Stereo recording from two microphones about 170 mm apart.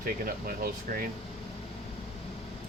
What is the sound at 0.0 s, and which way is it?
Speech, 60° right (ahead or behind).